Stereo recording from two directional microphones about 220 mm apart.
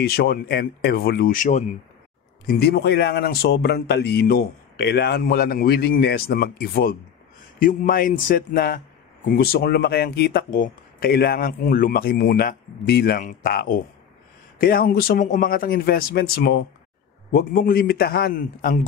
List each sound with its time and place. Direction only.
0.0 s a man's voice: 45° left (ahead or behind)